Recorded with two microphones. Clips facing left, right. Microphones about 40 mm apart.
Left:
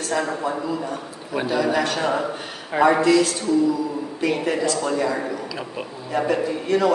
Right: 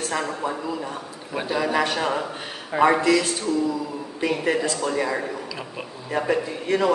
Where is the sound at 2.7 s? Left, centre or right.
Left.